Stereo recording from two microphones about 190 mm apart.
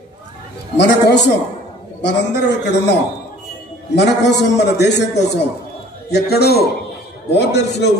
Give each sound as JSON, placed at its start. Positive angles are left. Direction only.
{"t": 0.7, "sound": "a man's voice", "side_deg": 65}